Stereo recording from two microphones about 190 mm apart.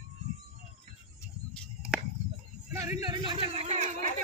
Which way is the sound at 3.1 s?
25° right (ahead or behind).